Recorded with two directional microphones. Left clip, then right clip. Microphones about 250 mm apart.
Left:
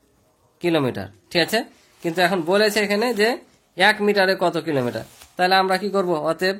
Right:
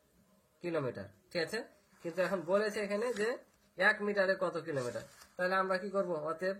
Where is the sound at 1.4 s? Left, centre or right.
Left.